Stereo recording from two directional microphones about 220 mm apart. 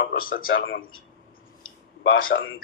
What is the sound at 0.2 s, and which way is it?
Speech, 40° left (ahead or behind).